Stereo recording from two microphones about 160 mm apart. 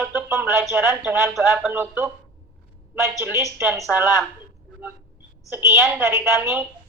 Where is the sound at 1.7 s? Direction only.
15° right (ahead or behind).